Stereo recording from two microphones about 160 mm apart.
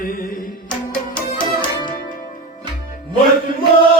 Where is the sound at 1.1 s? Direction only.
5° left (ahead or behind).